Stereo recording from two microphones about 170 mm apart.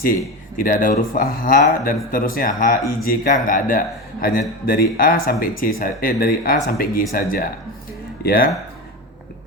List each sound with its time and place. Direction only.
0.6 s speech: 55° left (ahead or behind)